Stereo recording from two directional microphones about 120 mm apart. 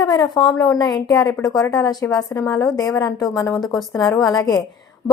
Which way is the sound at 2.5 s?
5° left (ahead or behind).